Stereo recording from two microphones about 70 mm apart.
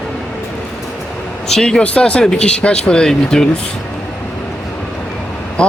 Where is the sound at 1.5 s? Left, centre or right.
Centre.